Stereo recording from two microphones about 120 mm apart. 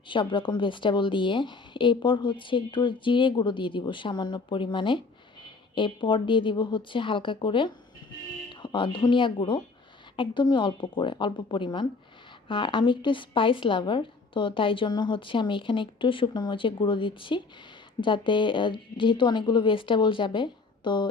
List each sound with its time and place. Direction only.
0.1 s a woman's voice: 45° left (ahead or behind)